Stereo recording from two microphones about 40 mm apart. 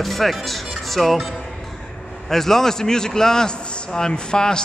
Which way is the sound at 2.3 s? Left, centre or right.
Centre.